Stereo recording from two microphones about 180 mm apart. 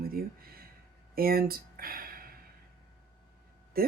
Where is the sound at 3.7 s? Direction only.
55° right (ahead or behind).